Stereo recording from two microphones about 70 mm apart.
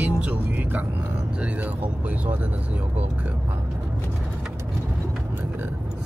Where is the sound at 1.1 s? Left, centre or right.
Centre.